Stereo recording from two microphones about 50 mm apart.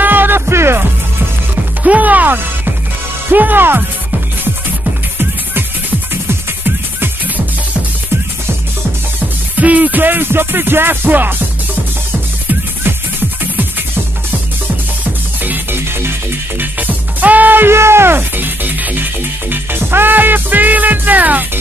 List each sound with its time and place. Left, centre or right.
0.0 s music: right
0.5 s music: right
1.5 s music: right
5.2 s music: right
9.6 s music: right
15.4 s music: right
17.6 s music: right
19.5 s music: right